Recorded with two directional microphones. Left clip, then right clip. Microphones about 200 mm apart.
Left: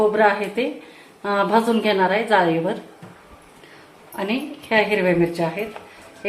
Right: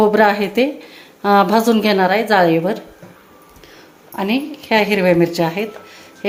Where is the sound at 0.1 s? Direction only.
45° right (ahead or behind).